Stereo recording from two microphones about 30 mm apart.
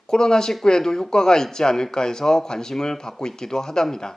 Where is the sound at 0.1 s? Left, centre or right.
Left.